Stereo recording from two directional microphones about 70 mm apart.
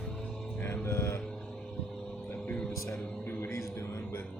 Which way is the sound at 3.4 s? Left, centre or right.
Left.